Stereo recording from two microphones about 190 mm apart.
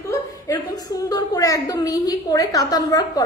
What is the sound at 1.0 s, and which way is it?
A woman's voice, 20° left (ahead or behind).